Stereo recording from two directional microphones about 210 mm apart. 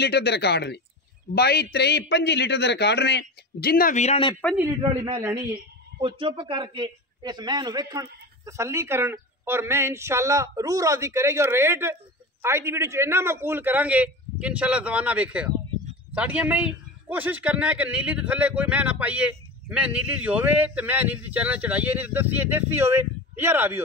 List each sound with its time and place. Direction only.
0.0 s a man's voice: 50° left (ahead or behind); by 4.4 s 25° left (ahead or behind)
4.8 s a man's voice: 25° right (ahead or behind)